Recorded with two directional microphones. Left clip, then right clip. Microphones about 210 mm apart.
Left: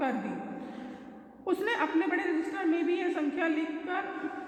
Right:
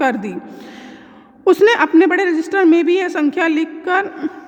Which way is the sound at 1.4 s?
50° right (ahead or behind).